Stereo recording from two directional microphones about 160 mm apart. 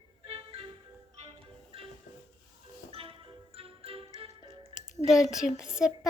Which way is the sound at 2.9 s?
35° right (ahead or behind).